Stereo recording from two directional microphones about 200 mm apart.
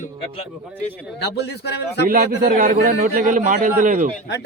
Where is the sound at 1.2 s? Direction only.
55° left (ahead or behind).